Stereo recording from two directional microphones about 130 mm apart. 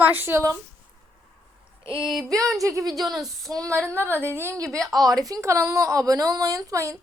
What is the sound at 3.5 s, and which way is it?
Speech, 25° right (ahead or behind).